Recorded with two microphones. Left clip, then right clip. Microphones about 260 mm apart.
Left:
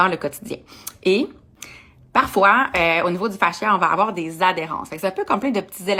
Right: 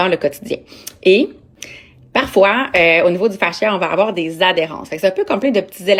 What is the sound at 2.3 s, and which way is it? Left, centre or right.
Speech, centre.